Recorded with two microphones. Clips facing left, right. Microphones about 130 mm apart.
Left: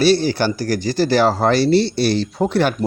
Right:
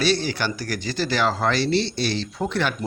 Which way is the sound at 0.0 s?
35° left (ahead or behind).